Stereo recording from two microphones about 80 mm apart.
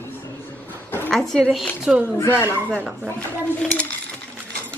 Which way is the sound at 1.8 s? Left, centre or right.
Centre.